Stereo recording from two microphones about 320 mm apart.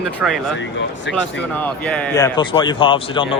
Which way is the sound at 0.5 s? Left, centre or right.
Left.